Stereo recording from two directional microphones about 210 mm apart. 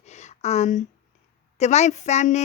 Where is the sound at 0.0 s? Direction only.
30° left (ahead or behind).